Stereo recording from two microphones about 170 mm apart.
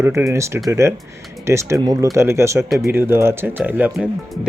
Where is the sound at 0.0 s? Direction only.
15° right (ahead or behind).